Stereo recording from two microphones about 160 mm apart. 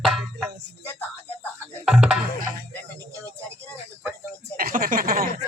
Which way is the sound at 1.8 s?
5° right (ahead or behind).